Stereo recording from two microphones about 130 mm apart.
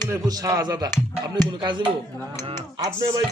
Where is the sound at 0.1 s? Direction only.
25° right (ahead or behind).